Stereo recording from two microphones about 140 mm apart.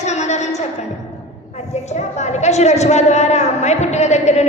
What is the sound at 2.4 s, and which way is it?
A man's voice, 55° left (ahead or behind).